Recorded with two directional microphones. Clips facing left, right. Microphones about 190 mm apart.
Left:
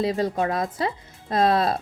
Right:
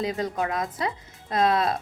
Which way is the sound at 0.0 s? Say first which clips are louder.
Left 4 dB; 30° left (ahead or behind).